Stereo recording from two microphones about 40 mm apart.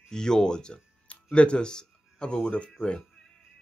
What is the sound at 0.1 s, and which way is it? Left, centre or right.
Speech, centre.